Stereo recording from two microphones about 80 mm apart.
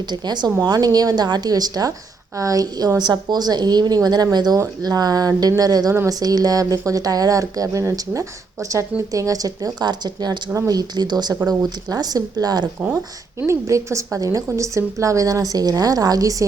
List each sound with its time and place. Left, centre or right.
0.1 s a woman's voice: right
3.0 s a woman's voice: right
13.5 s a woman's voice: right